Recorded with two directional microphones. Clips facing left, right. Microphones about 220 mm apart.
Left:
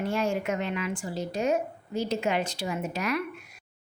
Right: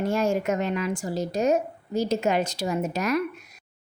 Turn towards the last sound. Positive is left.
turn(degrees=-40)  # may be behind; listen again after turning